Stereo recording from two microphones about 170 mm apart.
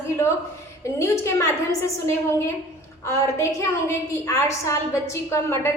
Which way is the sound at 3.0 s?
20° left (ahead or behind).